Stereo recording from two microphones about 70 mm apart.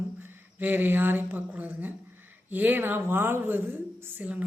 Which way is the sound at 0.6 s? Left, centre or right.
Right.